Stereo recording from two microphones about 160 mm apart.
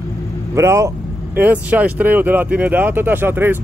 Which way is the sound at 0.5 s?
20° right (ahead or behind).